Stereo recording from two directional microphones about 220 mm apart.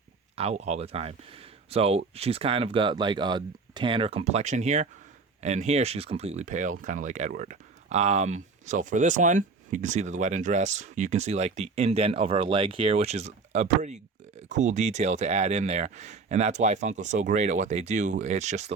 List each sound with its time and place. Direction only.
0.3 s speech: 30° right (ahead or behind)